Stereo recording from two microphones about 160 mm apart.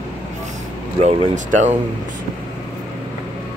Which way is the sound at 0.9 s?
45° right (ahead or behind).